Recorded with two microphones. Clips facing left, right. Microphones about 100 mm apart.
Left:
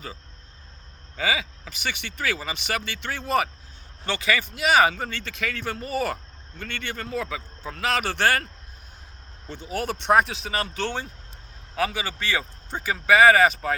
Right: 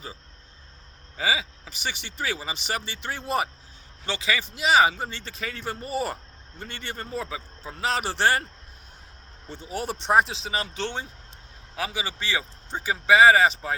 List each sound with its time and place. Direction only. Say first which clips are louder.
1.1 s a man's voice: even; 25° right (ahead or behind)
6.6 s a man's voice: left 4 dB; 80° left
6.8 s a man's voice: left 2 dB; 30° right (ahead or behind)
9.6 s a man's voice: left 3 dB; 30° right (ahead or behind)